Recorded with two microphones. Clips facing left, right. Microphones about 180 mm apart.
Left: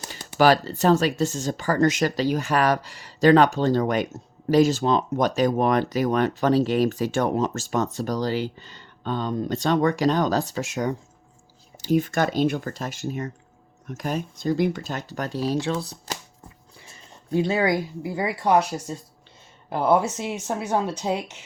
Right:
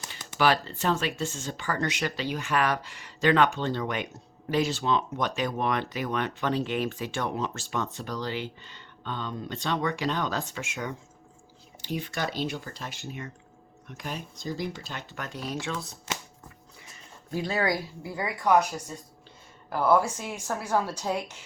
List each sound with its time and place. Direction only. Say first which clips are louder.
0.0 s speech: left 6 dB; 35° left (ahead or behind)
17.3 s speech: left 6 dB; 25° left (ahead or behind)
19.7 s speech: left 3 dB; 20° left (ahead or behind)